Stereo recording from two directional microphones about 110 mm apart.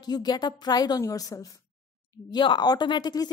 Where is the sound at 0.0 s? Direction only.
40° left (ahead or behind).